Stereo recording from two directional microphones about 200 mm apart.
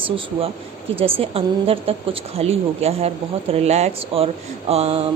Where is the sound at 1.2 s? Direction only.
30° right (ahead or behind).